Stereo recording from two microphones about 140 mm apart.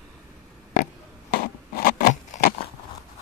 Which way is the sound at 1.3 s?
90° left.